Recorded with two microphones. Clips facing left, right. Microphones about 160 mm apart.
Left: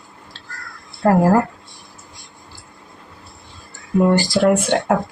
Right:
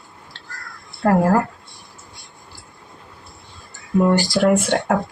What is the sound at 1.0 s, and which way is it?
Speech, 10° left (ahead or behind).